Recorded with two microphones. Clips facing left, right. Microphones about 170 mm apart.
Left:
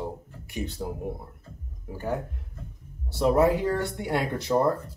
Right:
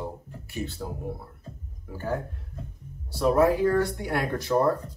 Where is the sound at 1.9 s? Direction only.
15° left (ahead or behind).